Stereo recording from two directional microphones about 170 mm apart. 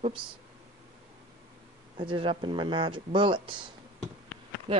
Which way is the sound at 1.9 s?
30° right (ahead or behind).